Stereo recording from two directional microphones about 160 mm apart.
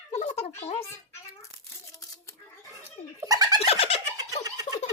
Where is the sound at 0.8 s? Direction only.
15° left (ahead or behind).